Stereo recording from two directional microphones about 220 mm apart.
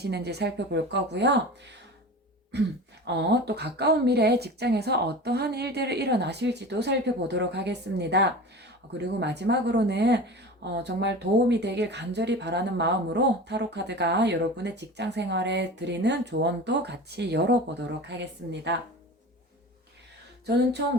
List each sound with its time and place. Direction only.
0.0 s speech: 50° right (ahead or behind)
2.5 s speech: 50° right (ahead or behind)